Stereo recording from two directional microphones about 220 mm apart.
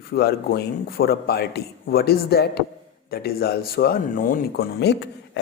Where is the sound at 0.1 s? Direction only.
45° left (ahead or behind).